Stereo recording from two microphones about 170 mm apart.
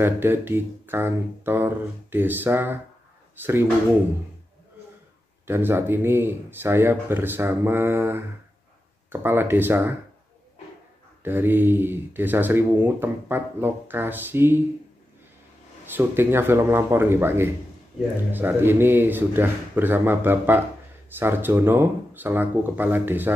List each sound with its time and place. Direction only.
0.0 s speech: 10° right (ahead or behind)
5.5 s speech: 10° right (ahead or behind)
11.2 s speech: 10° right (ahead or behind)
15.8 s speech: 10° right (ahead or behind)